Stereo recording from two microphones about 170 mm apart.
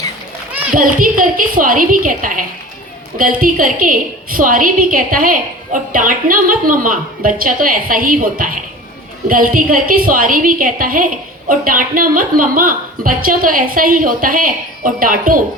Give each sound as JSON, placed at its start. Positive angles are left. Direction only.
{"t": 0.7, "sound": "a woman's voice", "side_deg": -55}